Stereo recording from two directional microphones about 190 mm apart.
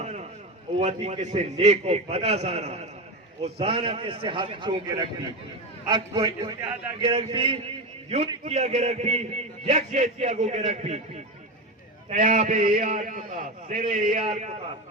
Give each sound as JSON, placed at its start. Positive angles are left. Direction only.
{"t": 0.0, "sound": "a sound", "side_deg": -35}
{"t": 0.8, "sound": "a man's voice", "side_deg": -35}
{"t": 12.0, "sound": "a man's voice", "side_deg": -40}